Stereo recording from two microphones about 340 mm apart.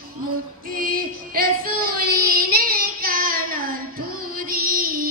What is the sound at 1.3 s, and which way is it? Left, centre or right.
Child singing, right.